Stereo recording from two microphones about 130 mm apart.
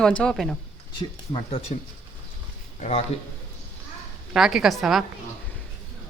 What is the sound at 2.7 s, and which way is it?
Speech, 65° left (ahead or behind).